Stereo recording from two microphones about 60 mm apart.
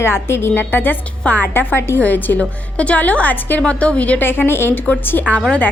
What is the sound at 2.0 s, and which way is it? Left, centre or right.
Speech, left.